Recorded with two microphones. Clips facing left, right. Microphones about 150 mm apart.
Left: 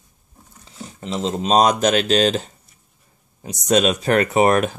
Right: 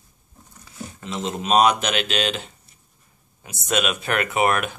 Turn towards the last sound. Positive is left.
turn(degrees=35)  # may be behind; listen again after turning